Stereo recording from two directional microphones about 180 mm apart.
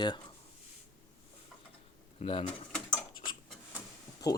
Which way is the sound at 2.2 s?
30° left (ahead or behind).